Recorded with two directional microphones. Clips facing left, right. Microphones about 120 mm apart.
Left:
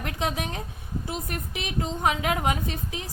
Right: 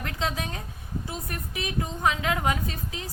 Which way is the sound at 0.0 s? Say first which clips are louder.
Left 1 dB; 20° left (ahead or behind).